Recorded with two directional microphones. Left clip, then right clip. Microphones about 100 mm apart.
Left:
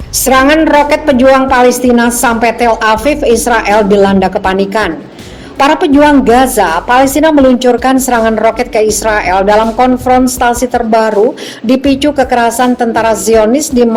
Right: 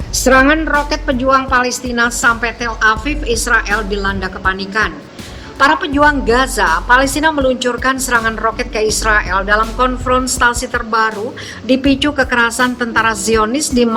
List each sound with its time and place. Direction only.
0.3 s a woman's voice: 30° left (ahead or behind)